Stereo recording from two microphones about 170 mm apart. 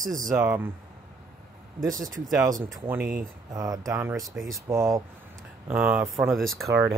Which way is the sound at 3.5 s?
20° right (ahead or behind).